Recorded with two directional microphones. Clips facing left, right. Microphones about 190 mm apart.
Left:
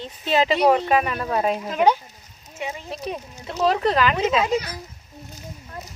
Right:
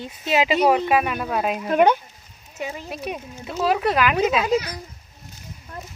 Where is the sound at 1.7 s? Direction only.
60° right (ahead or behind).